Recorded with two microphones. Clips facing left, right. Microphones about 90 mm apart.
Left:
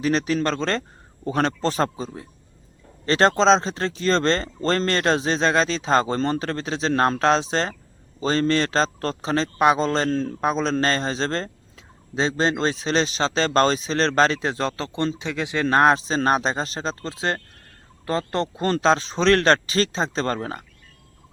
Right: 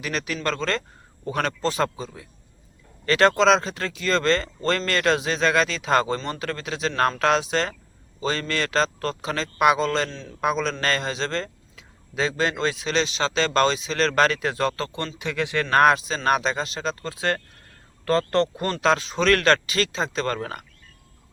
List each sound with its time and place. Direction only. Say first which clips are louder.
0.0 s a man's voice: left 6 dB; 30° left (ahead or behind)
10.1 s a man's voice: left 14 dB; 50° left (ahead or behind)
10.4 s a man's voice: even; 35° left (ahead or behind)
18.7 s a man's voice: left 2 dB; 30° left (ahead or behind)